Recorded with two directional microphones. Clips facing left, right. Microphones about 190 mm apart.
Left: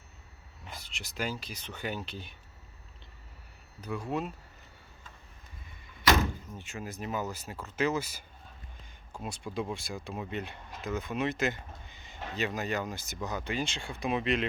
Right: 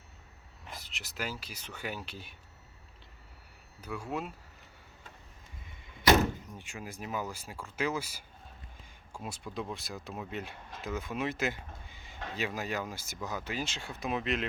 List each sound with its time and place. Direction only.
0.6 s speech: centre (ahead or behind)
3.8 s speech: 10° right (ahead or behind)
5.9 s door: 20° right (ahead or behind)
6.8 s speech: 10° right (ahead or behind)
9.2 s speech: 5° right (ahead or behind)